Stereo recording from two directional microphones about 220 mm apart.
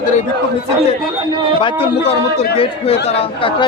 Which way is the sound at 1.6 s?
25° left (ahead or behind).